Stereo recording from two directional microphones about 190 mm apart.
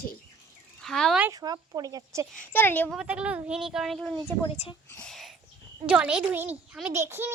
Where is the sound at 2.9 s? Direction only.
5° right (ahead or behind).